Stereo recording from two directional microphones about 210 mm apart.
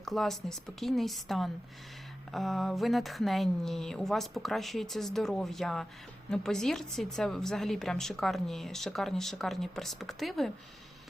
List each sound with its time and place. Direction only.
0.0 s a woman's voice: centre (ahead or behind)